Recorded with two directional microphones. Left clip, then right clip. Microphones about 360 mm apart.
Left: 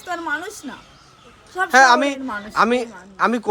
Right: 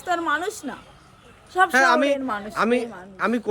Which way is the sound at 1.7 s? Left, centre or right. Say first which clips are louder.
Left 8 dB; centre.